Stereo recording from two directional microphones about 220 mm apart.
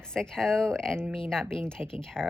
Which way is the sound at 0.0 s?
5° left (ahead or behind).